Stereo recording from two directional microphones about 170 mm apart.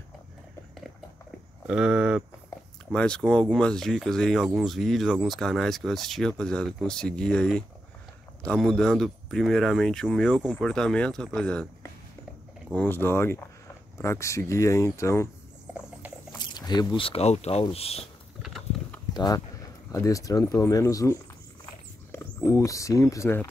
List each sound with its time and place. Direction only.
1.7 s speech: 5° right (ahead or behind)
2.9 s speech: 5° left (ahead or behind)
16.3 s speech: 25° left (ahead or behind)
18.4 s a sound: centre (ahead or behind)
19.1 s speech: 25° left (ahead or behind)